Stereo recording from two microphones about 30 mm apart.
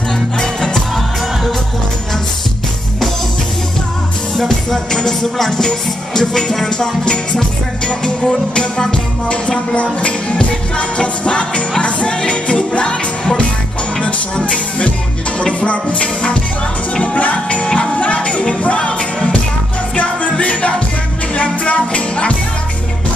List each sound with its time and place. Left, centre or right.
4.4 s music: centre
5.0 s music: left
9.3 s music: left
14.0 s music: left
20.0 s music: left
20.3 s music: left